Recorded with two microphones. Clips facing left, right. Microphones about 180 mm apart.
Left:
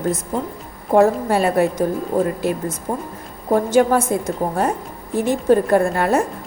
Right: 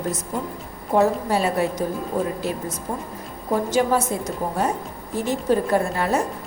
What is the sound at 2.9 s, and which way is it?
A woman's voice, 55° left (ahead or behind).